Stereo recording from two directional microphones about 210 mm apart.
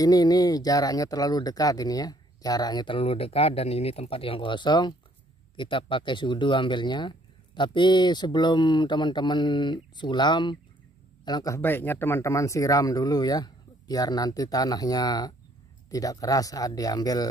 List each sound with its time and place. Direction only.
0.0 s speech: 15° left (ahead or behind)